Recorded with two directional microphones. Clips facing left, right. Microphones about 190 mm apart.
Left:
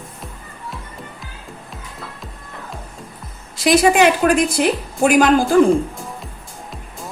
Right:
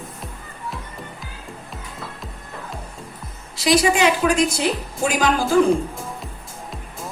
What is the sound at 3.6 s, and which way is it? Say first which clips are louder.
A woman's voice: left 4 dB; 50° left (ahead or behind).